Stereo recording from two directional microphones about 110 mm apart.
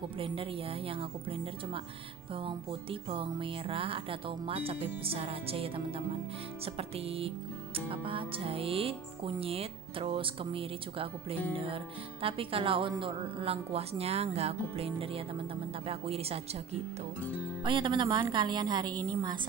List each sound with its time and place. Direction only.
0.2 s music: 55° right (ahead or behind)
17.6 s a woman's voice: 50° right (ahead or behind)